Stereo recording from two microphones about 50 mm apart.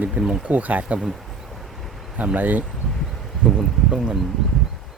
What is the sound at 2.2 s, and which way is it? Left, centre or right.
Speech, right.